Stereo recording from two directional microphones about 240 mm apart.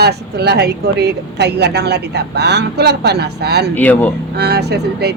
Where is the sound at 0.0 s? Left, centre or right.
Right.